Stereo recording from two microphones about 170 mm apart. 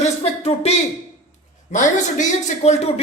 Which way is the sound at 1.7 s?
45° left (ahead or behind).